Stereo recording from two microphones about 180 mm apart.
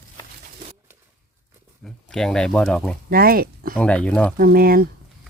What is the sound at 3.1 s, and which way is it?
Speech, 55° right (ahead or behind).